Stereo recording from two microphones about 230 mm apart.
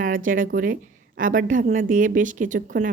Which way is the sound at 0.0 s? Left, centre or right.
Right.